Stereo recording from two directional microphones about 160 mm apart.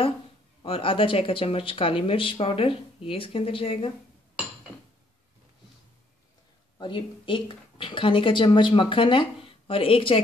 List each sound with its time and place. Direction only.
0.6 s speech: 35° left (ahead or behind)
6.8 s speech: 30° left (ahead or behind)